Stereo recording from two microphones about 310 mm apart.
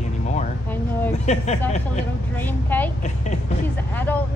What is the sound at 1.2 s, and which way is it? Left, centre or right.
Speech, left.